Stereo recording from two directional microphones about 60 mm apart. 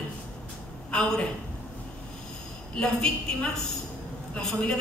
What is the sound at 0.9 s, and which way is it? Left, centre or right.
Speech, centre.